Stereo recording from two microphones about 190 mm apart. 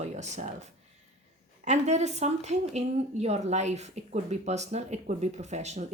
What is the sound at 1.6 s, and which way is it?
A woman's voice, 35° right (ahead or behind).